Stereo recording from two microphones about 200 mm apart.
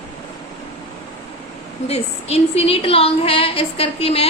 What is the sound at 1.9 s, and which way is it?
A woman's voice, 30° left (ahead or behind).